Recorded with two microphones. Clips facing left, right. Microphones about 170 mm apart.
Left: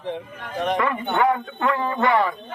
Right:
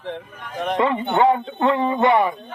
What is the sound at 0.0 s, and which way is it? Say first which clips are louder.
Speech: left 1 dB; centre (ahead or behind).